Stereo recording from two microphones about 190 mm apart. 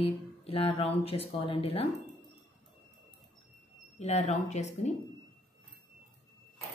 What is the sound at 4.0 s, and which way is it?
Speech, 35° left (ahead or behind).